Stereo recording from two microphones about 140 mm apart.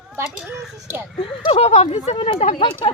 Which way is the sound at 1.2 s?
45° left (ahead or behind).